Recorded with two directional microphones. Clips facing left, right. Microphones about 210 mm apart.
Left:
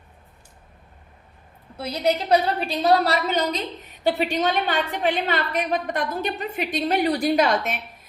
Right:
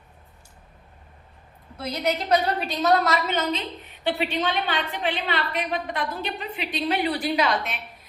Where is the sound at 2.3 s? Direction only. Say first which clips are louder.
Left 2 dB; 30° left (ahead or behind).